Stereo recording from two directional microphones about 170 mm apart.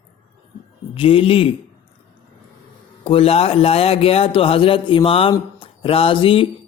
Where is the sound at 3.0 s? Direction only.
35° left (ahead or behind).